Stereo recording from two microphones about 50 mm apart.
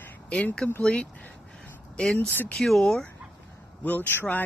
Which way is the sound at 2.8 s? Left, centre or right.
Centre.